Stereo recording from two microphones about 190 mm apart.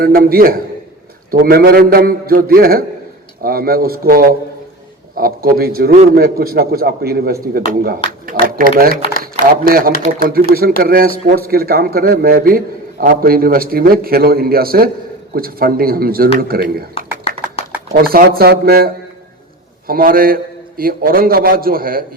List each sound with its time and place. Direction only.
0.0 s speech: 50° right (ahead or behind)
17.7 s speech: 50° right (ahead or behind)
19.9 s speech: 50° right (ahead or behind)